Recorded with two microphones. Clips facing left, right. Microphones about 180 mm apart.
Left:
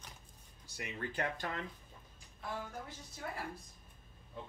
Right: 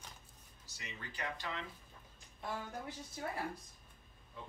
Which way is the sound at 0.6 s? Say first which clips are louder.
Left 8 dB; 55° left (ahead or behind).